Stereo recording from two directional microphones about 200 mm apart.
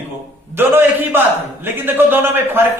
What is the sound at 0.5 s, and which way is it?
A man's voice, 10° right (ahead or behind).